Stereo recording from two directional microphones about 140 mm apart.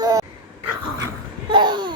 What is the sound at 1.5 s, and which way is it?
Babbling, 35° right (ahead or behind).